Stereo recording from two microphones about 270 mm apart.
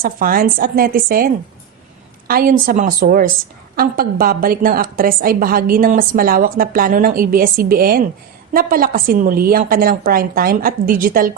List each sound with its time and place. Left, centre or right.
0.0 s a woman's voice: right